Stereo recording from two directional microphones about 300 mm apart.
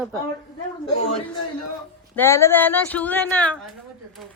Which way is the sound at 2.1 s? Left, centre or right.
Centre.